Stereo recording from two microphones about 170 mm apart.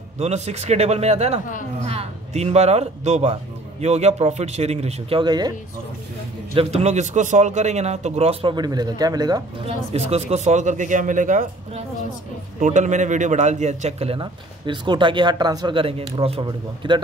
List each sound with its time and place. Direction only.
0.2 s speech: 40° right (ahead or behind)
5.2 s speech: 25° right (ahead or behind)
6.5 s speech: 35° right (ahead or behind)
9.9 s a man's voice: 40° right (ahead or behind)